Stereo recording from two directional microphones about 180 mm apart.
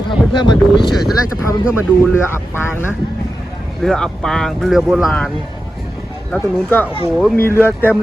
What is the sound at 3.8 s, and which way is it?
Speech, 5° left (ahead or behind).